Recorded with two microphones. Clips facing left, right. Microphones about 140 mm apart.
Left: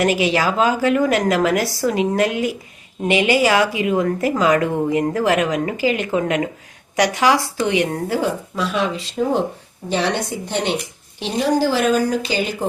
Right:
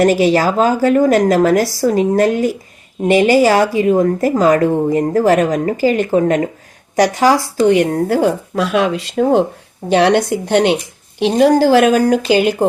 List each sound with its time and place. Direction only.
0.0 s a woman's voice: 40° right (ahead or behind); by 12.6 s 65° right (ahead or behind)